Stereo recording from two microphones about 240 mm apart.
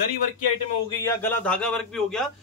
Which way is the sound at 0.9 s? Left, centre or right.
Centre.